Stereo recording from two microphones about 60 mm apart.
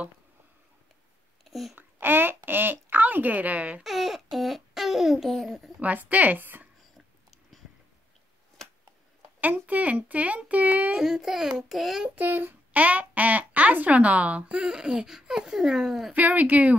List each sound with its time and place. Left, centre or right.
1.4 s speech: centre
1.8 s speech: right
3.8 s a sound: centre
5.3 s a child's voice: centre
5.8 s speech: right
9.4 s speech: right
11.0 s a child's voice: centre
12.2 s speech: right; by 16.1 s centre
16.1 s speech: right